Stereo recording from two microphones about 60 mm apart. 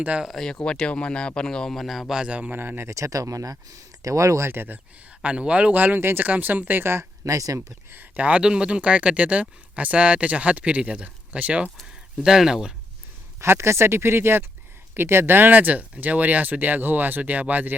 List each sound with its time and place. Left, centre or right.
0.3 s a man's voice: centre
2.2 s speech: right
2.5 s speech: right
2.9 s speech: right
5.2 s speech: centre
6.0 s speech: right
6.2 s speech: right
7.3 s speech: right
8.1 s speech: right
12.2 s speech: centre
13.4 s speech: right